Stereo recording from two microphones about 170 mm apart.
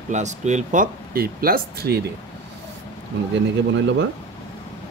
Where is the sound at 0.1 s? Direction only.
45° right (ahead or behind); by 2.0 s 65° right (ahead or behind).